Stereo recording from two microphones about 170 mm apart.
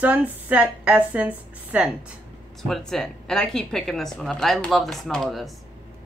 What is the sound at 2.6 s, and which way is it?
Speech, centre (ahead or behind).